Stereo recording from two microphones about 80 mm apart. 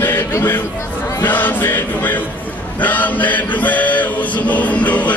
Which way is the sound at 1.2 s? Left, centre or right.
Left.